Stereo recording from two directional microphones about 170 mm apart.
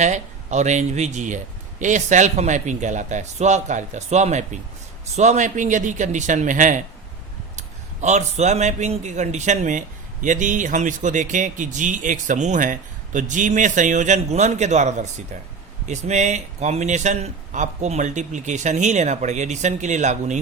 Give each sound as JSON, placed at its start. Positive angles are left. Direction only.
{"t": 0.0, "sound": "a man's voice", "side_deg": -45}
{"t": 8.0, "sound": "a man's voice", "side_deg": -40}